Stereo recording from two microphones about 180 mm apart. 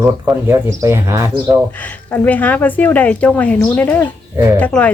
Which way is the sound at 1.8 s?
10° left (ahead or behind).